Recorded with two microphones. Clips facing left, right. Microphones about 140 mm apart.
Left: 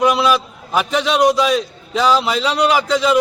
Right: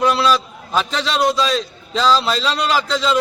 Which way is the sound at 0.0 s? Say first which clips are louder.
Left 1 dB; 15° left (ahead or behind).